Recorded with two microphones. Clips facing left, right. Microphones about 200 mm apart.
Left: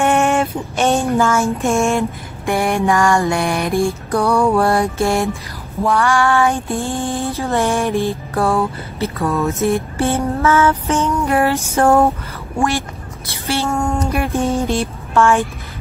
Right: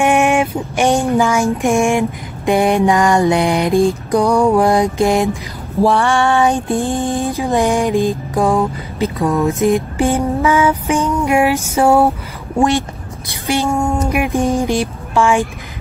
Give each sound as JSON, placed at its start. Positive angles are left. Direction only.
{"t": 0.0, "sound": "female singing", "side_deg": -15}
{"t": 5.8, "sound": "female singing", "side_deg": -30}